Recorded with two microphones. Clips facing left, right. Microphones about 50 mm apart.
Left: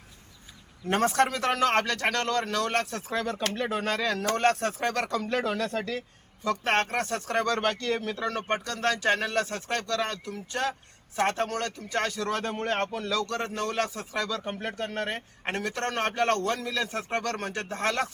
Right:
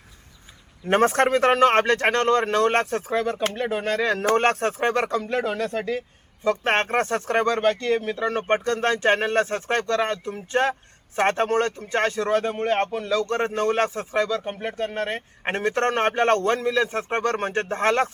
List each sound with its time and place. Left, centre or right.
0.9 s speech: right; by 4.0 s centre
4.0 s speech: right
5.1 s speech: centre
6.4 s speech: right
7.5 s speech: centre; by 12.3 s right
12.3 s speech: centre
13.2 s speech: right
14.3 s speech: centre
15.4 s speech: right